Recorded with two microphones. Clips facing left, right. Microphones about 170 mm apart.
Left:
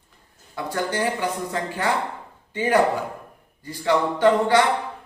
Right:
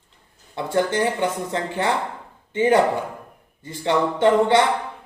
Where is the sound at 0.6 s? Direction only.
25° right (ahead or behind).